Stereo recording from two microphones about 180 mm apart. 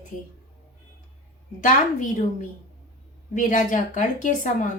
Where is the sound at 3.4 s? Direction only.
45° left (ahead or behind).